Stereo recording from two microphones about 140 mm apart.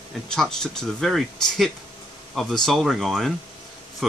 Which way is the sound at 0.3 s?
5° left (ahead or behind).